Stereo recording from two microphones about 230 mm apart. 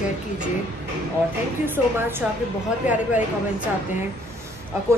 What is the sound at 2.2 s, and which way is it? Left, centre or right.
Speech, centre.